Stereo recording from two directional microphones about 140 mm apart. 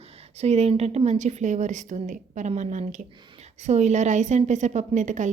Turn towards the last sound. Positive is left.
turn(degrees=-60)  # may be behind; listen again after turning